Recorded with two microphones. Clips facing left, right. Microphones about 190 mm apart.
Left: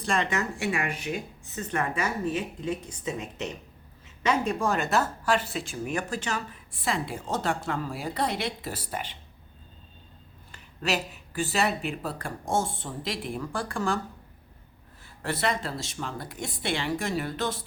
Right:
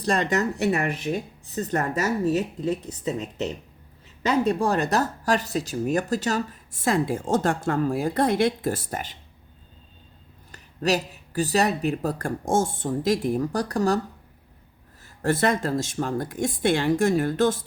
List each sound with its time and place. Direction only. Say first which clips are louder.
0.0 s speech: right 5 dB; 40° right (ahead or behind)
4.3 s speech: right 4 dB; 35° right (ahead or behind)
10.5 s speech: right 5 dB; 40° right (ahead or behind)
15.0 s speech: right 7 dB; 45° right (ahead or behind)